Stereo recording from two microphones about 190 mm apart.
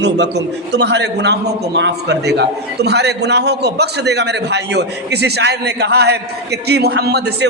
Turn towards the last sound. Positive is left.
turn(degrees=-60)  # may be behind; listen again after turning